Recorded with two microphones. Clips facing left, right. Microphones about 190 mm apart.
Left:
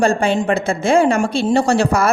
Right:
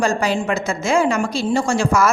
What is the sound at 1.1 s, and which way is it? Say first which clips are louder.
Speech: left 4 dB; 60° left (ahead or behind).